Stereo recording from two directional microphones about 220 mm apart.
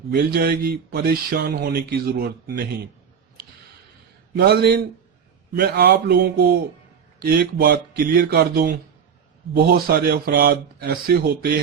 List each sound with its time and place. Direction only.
0.3 s speech: 45° right (ahead or behind)
4.4 s speech: 45° right (ahead or behind)